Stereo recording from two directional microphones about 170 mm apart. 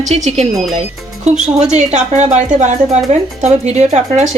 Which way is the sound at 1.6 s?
45° right (ahead or behind).